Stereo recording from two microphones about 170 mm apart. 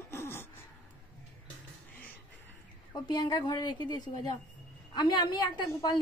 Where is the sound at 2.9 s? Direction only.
25° left (ahead or behind).